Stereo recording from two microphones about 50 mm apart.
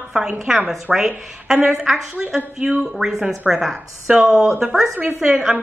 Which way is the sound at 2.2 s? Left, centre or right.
Centre.